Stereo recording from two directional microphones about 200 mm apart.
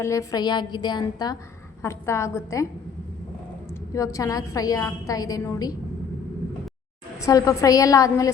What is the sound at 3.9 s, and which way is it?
A woman's voice, 15° left (ahead or behind).